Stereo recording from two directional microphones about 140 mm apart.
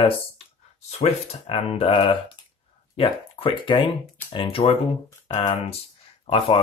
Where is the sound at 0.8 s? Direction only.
50° left (ahead or behind).